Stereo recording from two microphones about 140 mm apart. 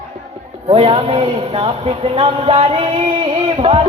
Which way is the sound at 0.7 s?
40° right (ahead or behind).